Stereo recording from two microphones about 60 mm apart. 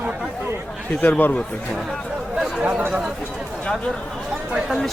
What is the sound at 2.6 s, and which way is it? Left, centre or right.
Speech, centre.